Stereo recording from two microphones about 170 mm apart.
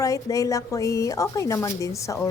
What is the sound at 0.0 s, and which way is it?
A woman's voice, 20° left (ahead or behind).